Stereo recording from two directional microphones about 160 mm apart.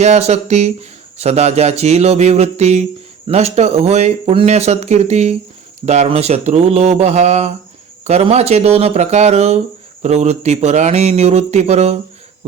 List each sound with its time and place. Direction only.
0.0 s speech: 45° right (ahead or behind)